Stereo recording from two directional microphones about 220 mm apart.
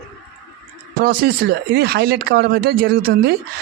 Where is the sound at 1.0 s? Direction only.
45° right (ahead or behind).